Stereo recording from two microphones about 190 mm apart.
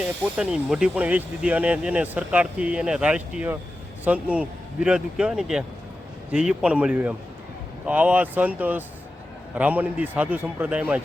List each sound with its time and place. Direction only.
0.0 s speech: 5° right (ahead or behind)